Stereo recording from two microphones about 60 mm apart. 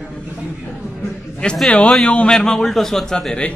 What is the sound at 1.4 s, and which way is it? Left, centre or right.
A man's voice, centre.